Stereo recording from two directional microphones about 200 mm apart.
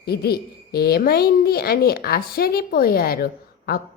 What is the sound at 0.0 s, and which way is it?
A woman's voice, 50° left (ahead or behind).